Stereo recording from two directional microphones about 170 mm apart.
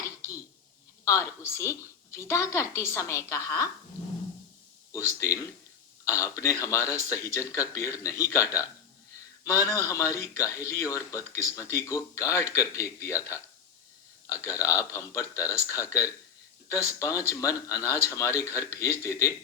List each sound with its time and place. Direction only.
1.0 s a woman's voice: 15° left (ahead or behind)
4.9 s a woman's voice: 15° left (ahead or behind)
14.4 s a woman's voice: 20° left (ahead or behind)